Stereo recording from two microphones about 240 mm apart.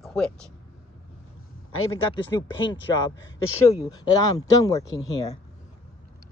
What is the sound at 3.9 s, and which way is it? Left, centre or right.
Speech, centre.